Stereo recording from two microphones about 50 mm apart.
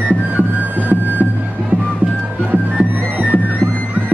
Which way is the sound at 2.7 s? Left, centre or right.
Right.